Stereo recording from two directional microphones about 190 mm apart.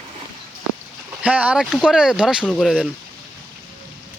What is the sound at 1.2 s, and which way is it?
Speech, 5° right (ahead or behind).